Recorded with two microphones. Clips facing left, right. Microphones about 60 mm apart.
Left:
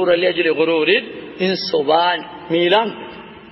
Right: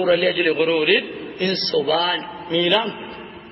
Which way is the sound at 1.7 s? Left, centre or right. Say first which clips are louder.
Left 2 dB; left.